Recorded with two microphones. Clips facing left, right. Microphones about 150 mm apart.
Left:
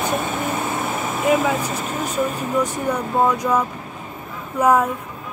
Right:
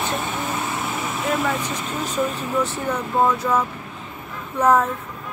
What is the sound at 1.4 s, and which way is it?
Speech, 10° left (ahead or behind).